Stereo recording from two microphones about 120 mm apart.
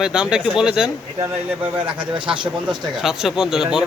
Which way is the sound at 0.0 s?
5° right (ahead or behind).